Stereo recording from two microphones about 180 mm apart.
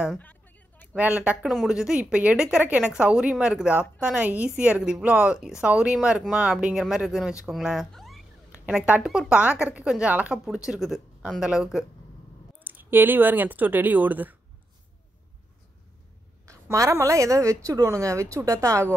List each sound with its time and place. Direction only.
0.2 s a sound: 10° left (ahead or behind)
0.9 s a woman's voice: 10° right (ahead or behind)
16.4 s a woman's voice: 15° right (ahead or behind)